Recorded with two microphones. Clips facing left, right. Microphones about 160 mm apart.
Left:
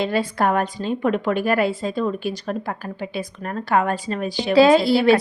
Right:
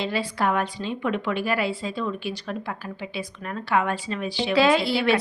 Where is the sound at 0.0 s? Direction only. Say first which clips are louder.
Left 5 dB; 50° left (ahead or behind).